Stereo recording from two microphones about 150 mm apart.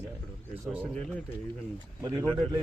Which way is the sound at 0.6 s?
10° right (ahead or behind).